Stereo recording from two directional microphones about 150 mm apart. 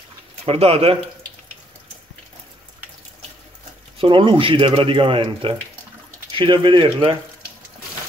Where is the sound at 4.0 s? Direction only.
35° right (ahead or behind).